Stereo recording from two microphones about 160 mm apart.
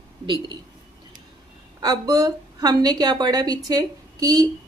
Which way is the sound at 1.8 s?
25° right (ahead or behind).